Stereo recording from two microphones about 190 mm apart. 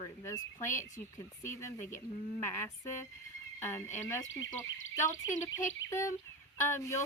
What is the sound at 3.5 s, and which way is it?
Speech, 15° left (ahead or behind).